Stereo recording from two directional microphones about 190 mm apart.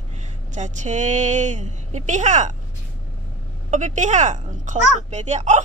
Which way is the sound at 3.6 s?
40° right (ahead or behind).